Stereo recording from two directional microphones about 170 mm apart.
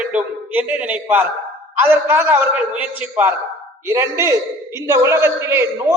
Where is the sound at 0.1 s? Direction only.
5° right (ahead or behind).